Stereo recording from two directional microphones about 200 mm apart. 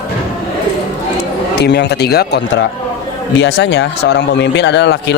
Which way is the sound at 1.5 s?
60° left (ahead or behind).